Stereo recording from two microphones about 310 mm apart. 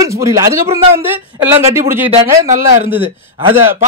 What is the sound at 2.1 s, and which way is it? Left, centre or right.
Speech, centre.